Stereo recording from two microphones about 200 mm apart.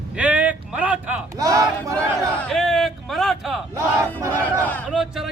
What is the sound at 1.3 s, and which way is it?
Speech, 15° right (ahead or behind).